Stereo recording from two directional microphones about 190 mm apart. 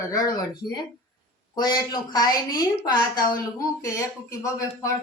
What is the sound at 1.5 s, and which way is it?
A woman's voice, 20° left (ahead or behind).